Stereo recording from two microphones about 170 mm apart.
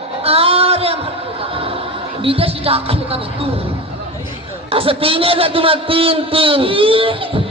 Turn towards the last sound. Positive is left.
turn(degrees=-30)  # may be behind; listen again after turning